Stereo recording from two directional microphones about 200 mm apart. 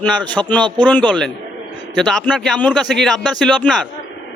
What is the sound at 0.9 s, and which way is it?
A man's voice, 5° left (ahead or behind).